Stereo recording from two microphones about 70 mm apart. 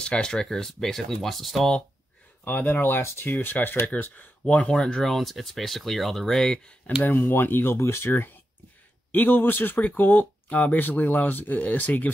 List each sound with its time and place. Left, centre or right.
0.0 s speech: centre
2.4 s speech: left
4.7 s speech: centre
7.0 s speech: left